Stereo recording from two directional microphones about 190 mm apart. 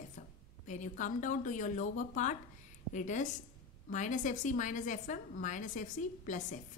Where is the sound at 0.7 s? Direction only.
40° left (ahead or behind).